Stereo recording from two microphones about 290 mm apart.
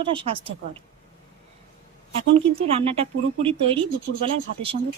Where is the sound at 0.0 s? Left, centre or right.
Centre.